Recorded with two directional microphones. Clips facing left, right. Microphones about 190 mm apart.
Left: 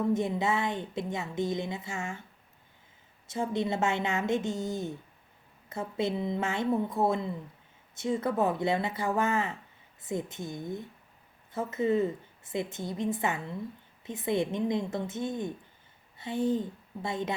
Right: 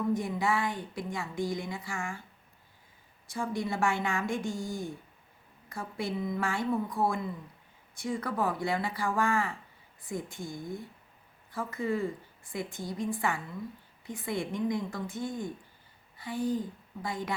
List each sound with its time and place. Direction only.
0.0 s a woman's voice: 25° left (ahead or behind)
3.2 s a woman's voice: 25° left (ahead or behind)